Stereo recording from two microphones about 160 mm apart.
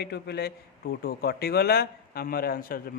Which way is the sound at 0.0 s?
90° left.